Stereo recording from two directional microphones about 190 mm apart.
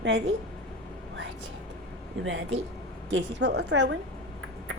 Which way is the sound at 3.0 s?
75° right (ahead or behind).